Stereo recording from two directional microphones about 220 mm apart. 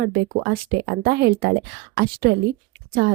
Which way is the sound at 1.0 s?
45° right (ahead or behind).